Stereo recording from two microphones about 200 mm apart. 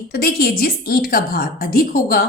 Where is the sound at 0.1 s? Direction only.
50° left (ahead or behind).